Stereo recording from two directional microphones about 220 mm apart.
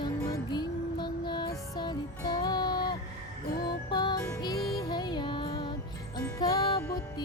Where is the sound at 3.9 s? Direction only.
20° left (ahead or behind).